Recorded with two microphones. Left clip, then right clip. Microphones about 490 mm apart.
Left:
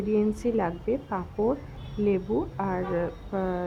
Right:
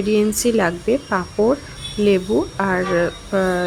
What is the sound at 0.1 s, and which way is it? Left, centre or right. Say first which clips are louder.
Speech: right 8 dB; left.